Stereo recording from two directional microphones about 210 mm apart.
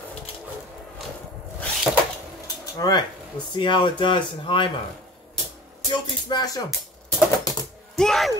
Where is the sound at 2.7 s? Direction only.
15° left (ahead or behind).